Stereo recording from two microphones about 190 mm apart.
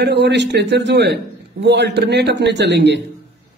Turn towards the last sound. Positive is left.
turn(degrees=-65)  # may be behind; listen again after turning